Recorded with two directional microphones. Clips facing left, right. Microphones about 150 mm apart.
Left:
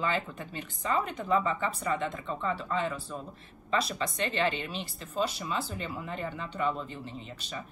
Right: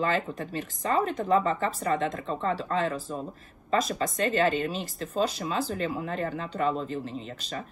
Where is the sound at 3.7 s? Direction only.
45° right (ahead or behind).